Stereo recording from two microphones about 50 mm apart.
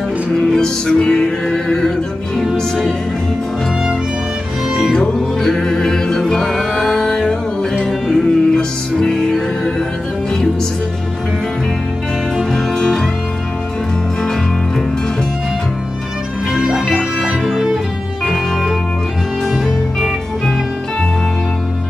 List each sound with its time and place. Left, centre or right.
0.4 s music: centre
4.9 s music: centre
12.4 s music: centre
16.5 s music: centre
19.5 s music: centre